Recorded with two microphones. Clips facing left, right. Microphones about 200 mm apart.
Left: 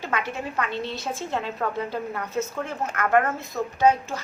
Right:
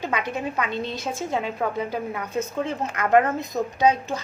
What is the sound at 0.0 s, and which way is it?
A woman's voice, 15° right (ahead or behind).